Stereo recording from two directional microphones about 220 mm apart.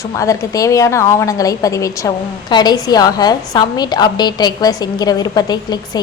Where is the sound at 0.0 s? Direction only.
15° left (ahead or behind).